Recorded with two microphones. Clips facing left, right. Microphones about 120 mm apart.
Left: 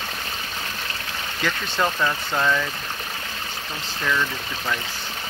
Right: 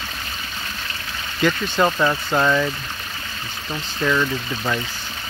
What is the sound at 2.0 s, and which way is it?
Speech, 20° right (ahead or behind).